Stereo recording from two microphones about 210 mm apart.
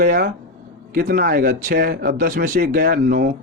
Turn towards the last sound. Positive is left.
turn(degrees=-40)  # may be behind; listen again after turning